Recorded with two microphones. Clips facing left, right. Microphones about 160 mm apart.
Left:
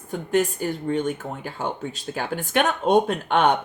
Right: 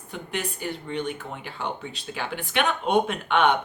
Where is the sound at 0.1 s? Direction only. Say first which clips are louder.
Left 10 dB; 45° left (ahead or behind).